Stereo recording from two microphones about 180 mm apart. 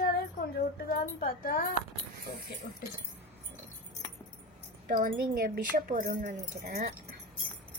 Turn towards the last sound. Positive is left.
turn(degrees=-50)  # may be behind; listen again after turning